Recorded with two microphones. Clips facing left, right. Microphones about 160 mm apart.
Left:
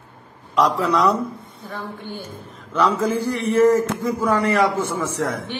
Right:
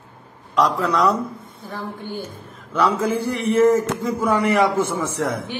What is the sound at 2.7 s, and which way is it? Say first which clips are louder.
Speech: even; 10° right (ahead or behind).